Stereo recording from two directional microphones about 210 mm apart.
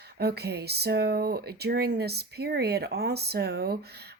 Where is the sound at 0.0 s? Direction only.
50° right (ahead or behind).